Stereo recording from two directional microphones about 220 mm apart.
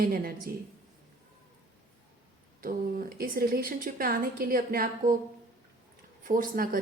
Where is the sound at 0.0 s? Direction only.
40° right (ahead or behind).